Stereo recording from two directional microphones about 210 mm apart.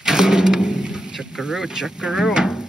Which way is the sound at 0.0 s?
5° right (ahead or behind).